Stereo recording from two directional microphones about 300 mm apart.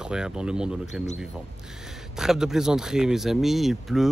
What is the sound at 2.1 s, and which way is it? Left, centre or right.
Speech, centre.